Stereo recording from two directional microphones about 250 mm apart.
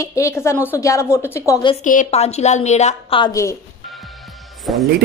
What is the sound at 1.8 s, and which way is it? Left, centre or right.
A woman's voice, left.